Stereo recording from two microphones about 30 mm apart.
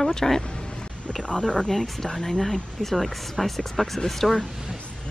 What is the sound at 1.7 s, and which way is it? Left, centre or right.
Speech, centre.